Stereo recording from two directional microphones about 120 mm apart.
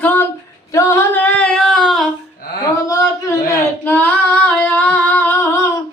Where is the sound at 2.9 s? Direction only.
30° left (ahead or behind).